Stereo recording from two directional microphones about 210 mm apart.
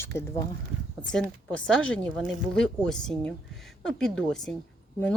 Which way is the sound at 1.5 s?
5° left (ahead or behind).